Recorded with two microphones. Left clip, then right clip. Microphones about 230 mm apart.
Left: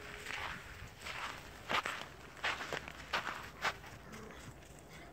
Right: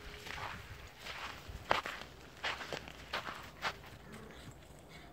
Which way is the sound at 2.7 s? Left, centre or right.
Right.